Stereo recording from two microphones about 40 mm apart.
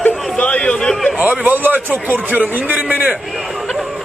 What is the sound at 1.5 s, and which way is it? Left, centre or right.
A man's voice, right.